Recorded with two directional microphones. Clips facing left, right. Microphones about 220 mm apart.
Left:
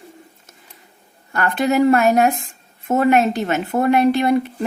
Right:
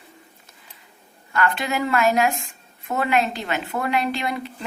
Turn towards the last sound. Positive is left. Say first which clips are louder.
# left 9 dB
turn(degrees=45)  # may be behind; listen again after turning